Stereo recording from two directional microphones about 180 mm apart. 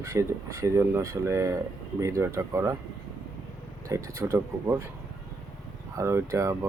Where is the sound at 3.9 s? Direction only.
15° right (ahead or behind).